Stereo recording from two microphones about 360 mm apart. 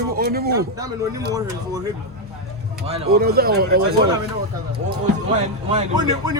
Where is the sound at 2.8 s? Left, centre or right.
Right.